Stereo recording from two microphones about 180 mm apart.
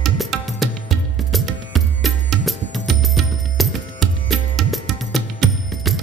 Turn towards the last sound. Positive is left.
turn(degrees=0)  # may be behind; listen again after turning